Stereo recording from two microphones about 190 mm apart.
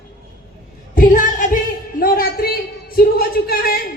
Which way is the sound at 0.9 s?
45° left (ahead or behind).